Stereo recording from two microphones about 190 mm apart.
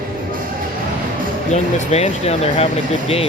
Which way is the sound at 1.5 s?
35° left (ahead or behind).